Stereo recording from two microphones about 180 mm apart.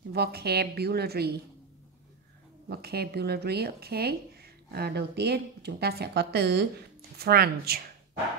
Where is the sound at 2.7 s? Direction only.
60° right (ahead or behind).